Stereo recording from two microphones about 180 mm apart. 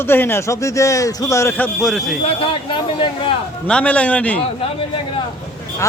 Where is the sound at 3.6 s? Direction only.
5° left (ahead or behind).